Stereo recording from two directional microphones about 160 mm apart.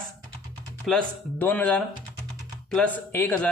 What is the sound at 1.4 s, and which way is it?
Speech, 10° left (ahead or behind).